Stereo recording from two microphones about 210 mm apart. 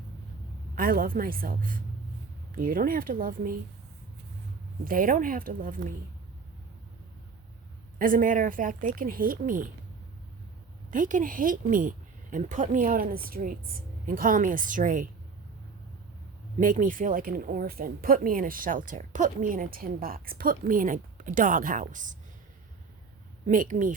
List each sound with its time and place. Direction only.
0.8 s a woman's voice: 45° right (ahead or behind)
4.9 s speech: 40° right (ahead or behind)
7.9 s speech: 40° right (ahead or behind)
10.9 s speech: 40° right (ahead or behind)
16.6 s speech: 40° right (ahead or behind)
23.5 s speech: 40° right (ahead or behind)